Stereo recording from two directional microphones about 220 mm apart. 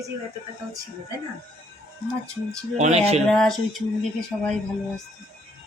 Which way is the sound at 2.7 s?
30° right (ahead or behind).